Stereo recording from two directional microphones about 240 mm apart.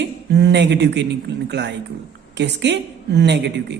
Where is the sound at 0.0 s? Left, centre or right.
Right.